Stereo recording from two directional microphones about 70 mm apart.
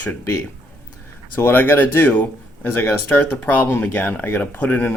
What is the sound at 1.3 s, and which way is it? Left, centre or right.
Speech, left.